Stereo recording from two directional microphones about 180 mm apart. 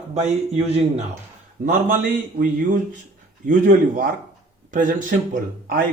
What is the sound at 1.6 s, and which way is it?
Speech, 50° right (ahead or behind).